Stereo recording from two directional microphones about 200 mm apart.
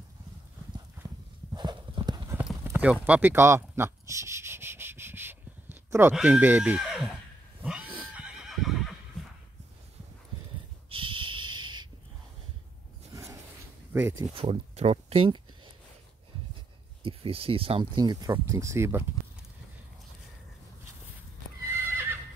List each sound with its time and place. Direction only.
1.0 s clip-clop: 20° right (ahead or behind)
2.5 s clip-clop: 10° right (ahead or behind)
6.1 s speech: 5° right (ahead or behind)
7.6 s a sound: 5° right (ahead or behind)
8.1 s neigh: 5° right (ahead or behind)
10.9 s a sound: 25° right (ahead or behind)
13.1 s a sound: 15° right (ahead or behind)
13.9 s speech: 10° right (ahead or behind)
14.3 s speech: 30° right (ahead or behind)
17.0 s speech: 25° right (ahead or behind); by 19.0 s 10° right (ahead or behind)
21.8 s neigh: 10° right (ahead or behind)